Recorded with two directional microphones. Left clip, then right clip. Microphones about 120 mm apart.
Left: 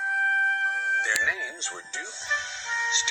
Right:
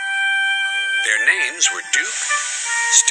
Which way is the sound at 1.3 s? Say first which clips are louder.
Right 12 dB; 40° right (ahead or behind).